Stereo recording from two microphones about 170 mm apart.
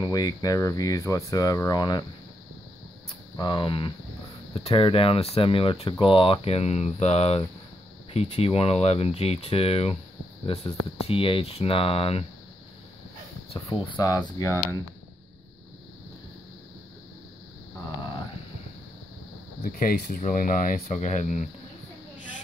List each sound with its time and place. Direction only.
0.0 s speech: 20° left (ahead or behind)
3.3 s speech: 30° left (ahead or behind)
13.5 s speech: 30° left (ahead or behind)
19.6 s speech: 55° left (ahead or behind)